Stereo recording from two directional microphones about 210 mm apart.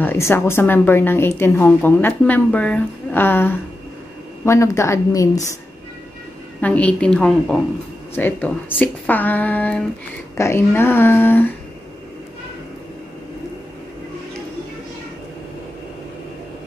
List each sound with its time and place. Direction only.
0.0 s a woman's voice: 10° left (ahead or behind)
6.6 s a woman's voice: 5° left (ahead or behind)